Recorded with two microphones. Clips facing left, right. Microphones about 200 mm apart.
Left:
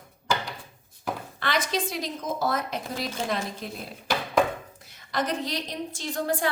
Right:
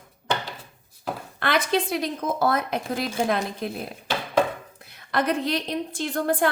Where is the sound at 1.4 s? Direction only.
55° right (ahead or behind).